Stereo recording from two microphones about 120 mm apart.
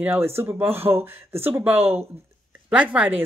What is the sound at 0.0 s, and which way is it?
Speech, 20° right (ahead or behind).